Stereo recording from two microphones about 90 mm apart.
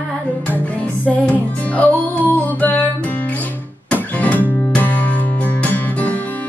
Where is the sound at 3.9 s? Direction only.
15° left (ahead or behind).